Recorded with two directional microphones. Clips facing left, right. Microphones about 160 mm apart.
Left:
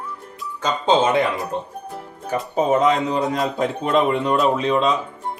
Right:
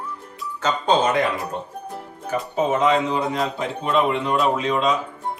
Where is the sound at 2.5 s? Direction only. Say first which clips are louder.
Left 2 dB; 40° left (ahead or behind).